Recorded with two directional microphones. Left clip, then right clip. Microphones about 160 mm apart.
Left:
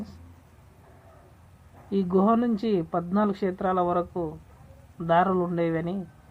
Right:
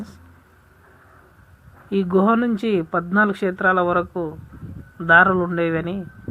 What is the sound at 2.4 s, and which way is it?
Speech, centre (ahead or behind).